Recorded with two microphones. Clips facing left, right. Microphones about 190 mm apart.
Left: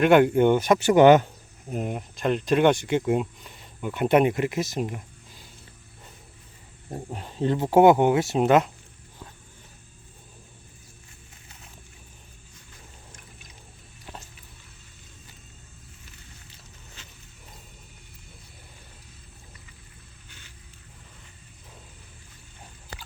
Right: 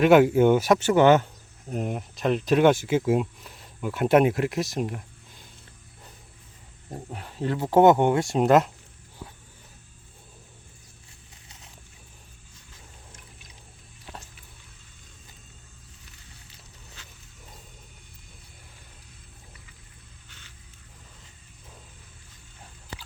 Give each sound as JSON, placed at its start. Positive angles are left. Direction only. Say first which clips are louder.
{"t": 0.0, "sound": "speech", "louder": "right 1 dB", "side_deg": 0}
{"t": 0.8, "sound": "speech", "louder": "left 3 dB", "side_deg": 15}
{"t": 1.7, "sound": "speech", "louder": "even", "side_deg": 0}
{"t": 6.9, "sound": "speech", "louder": "left 3 dB", "side_deg": 20}
{"t": 9.2, "sound": "a sound", "louder": "right 3 dB", "side_deg": -10}